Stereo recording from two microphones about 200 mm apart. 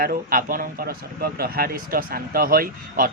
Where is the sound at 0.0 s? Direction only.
45° right (ahead or behind).